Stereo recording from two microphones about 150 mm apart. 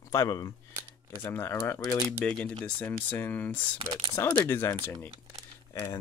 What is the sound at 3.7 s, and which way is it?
Speech, 30° right (ahead or behind).